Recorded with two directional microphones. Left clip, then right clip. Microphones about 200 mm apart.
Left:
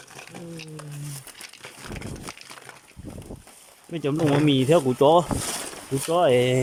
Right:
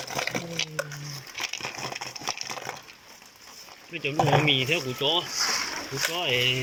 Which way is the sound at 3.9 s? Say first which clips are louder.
Even; 30° left (ahead or behind).